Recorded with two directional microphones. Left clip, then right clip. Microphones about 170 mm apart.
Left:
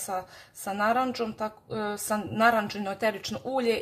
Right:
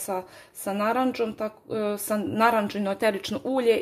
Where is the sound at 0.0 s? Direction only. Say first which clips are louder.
Right 2 dB; 40° right (ahead or behind).